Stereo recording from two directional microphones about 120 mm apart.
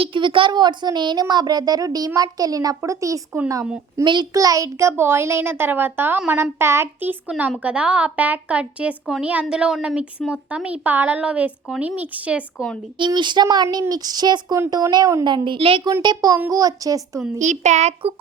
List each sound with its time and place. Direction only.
0.0 s speech: 45° right (ahead or behind); by 3.4 s 25° right (ahead or behind)
4.0 s a child's voice: 40° right (ahead or behind); by 12.6 s 10° right (ahead or behind)
13.0 s speech: 40° right (ahead or behind)
15.4 s a child's voice: 50° right (ahead or behind); by 17.2 s 30° right (ahead or behind)
17.3 s speech: 90° right; by 17.9 s 70° right (ahead or behind)